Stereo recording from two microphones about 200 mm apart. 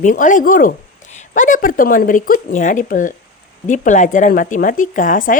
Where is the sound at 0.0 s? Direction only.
40° left (ahead or behind).